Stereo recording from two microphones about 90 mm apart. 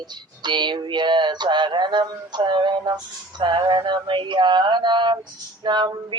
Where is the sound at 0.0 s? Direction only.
55° right (ahead or behind).